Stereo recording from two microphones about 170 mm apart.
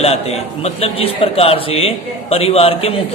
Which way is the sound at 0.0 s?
40° left (ahead or behind).